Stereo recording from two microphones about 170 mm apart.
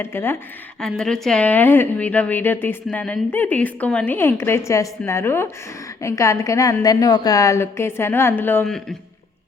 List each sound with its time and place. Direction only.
0.0 s a woman's voice: 15° left (ahead or behind)
0.8 s a woman's voice: 5° left (ahead or behind)